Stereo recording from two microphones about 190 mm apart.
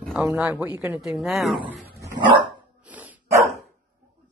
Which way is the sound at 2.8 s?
10° right (ahead or behind).